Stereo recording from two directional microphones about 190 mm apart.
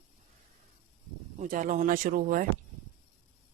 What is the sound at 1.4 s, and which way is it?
Speech, 45° right (ahead or behind).